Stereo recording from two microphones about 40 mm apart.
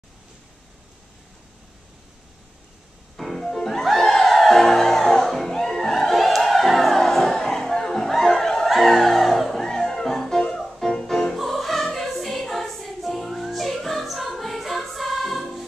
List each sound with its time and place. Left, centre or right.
3.2 s music: centre
8.6 s music: centre
10.8 s music: centre